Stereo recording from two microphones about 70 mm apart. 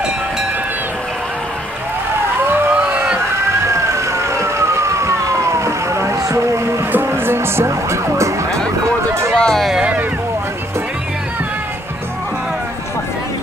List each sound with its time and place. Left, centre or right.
2.4 s emergency vehicle: right
3.6 s emergency vehicle: right
6.9 s speech: right
9.3 s a sound: centre
9.8 s boat: centre